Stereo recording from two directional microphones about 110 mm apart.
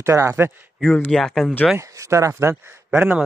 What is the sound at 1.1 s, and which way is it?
Speech, 5° left (ahead or behind).